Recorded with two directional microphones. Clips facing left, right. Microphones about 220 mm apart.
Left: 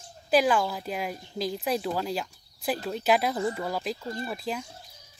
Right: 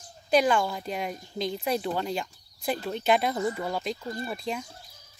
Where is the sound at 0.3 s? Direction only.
5° left (ahead or behind).